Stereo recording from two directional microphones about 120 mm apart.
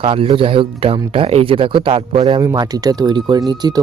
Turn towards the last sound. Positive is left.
turn(degrees=-35)  # may be behind; listen again after turning